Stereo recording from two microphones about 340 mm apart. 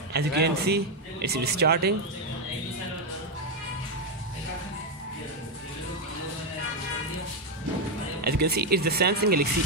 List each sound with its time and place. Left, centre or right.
0.1 s speech: right
8.2 s speech: right